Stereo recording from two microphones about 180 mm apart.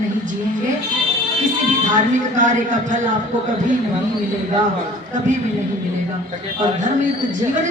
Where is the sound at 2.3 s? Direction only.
45° right (ahead or behind).